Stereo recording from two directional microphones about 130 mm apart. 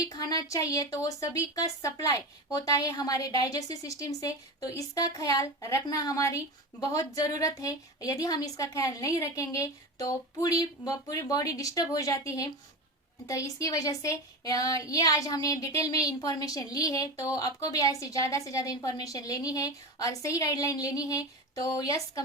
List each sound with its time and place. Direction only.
0.0 s a woman's voice: 25° left (ahead or behind)